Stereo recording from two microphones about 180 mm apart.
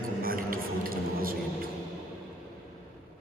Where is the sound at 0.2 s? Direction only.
55° right (ahead or behind).